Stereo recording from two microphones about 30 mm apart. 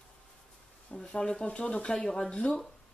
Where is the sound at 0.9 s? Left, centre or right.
Left.